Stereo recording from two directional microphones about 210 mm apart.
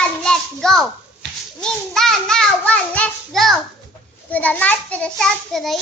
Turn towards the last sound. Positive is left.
turn(degrees=0)  # may be behind; listen again after turning